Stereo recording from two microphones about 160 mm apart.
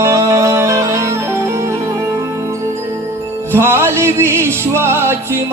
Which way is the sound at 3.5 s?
15° right (ahead or behind).